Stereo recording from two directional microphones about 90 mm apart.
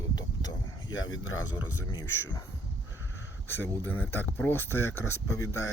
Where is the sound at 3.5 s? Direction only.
25° left (ahead or behind).